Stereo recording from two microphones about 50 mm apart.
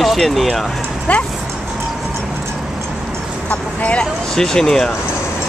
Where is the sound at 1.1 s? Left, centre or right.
Left.